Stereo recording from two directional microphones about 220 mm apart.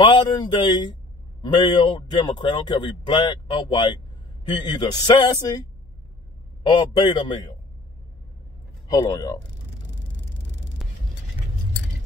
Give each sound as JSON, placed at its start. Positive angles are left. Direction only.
{"t": 0.0, "sound": "speech", "side_deg": 20}
{"t": 6.6, "sound": "speech", "side_deg": 20}
{"t": 8.9, "sound": "a man's voice", "side_deg": 15}